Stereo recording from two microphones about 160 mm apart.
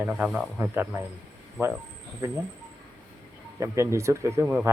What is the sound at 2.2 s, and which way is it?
Speech, 15° right (ahead or behind).